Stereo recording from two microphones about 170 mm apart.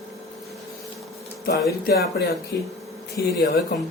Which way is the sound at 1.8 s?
70° left (ahead or behind).